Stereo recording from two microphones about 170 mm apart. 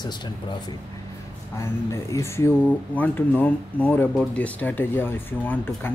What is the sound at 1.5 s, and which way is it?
Speech, 15° left (ahead or behind).